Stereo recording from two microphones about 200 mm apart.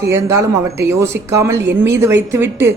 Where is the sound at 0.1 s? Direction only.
15° right (ahead or behind).